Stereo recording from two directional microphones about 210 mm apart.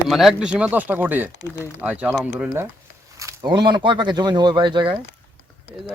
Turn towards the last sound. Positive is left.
turn(degrees=-25)  # may be behind; listen again after turning